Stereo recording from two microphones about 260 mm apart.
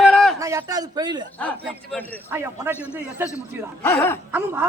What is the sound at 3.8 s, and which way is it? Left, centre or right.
Speech, centre.